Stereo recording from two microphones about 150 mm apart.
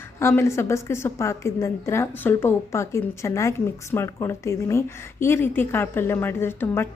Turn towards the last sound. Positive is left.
turn(degrees=15)  # may be behind; listen again after turning